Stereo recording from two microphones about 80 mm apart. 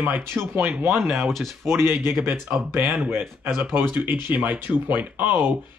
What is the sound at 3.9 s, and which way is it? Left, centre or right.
Speech, right.